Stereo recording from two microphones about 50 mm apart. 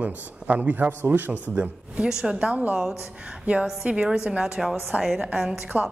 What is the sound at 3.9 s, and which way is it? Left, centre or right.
Speech, centre.